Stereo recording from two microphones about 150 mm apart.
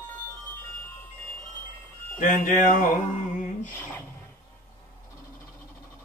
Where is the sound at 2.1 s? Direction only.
60° left (ahead or behind).